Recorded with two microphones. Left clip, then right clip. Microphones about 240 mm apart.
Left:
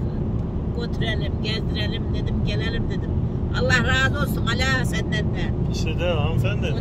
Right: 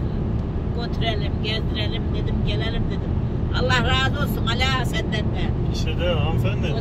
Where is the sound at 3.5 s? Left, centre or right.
Centre.